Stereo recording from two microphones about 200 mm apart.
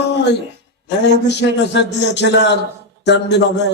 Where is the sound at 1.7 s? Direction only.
60° left (ahead or behind).